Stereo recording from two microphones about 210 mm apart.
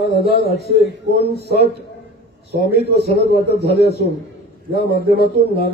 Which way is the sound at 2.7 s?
50° left (ahead or behind).